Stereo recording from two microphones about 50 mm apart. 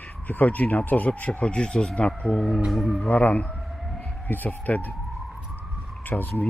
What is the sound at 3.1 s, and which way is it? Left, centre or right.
Speech, left.